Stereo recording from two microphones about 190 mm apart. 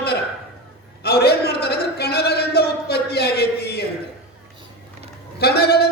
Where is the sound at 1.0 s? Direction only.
55° left (ahead or behind).